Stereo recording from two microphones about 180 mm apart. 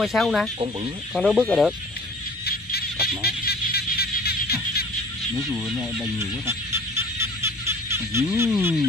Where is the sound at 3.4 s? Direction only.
60° left (ahead or behind).